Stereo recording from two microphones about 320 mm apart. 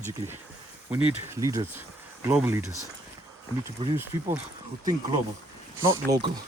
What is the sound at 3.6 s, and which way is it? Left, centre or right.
Speech, centre.